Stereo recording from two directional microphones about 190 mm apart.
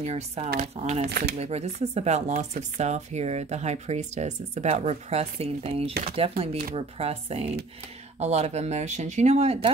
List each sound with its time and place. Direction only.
0.0 s speech: 35° right (ahead or behind)